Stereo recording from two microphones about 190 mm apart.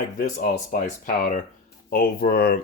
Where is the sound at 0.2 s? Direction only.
45° left (ahead or behind).